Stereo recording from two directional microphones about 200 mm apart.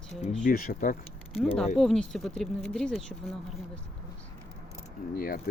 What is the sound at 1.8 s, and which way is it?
Speech, centre (ahead or behind).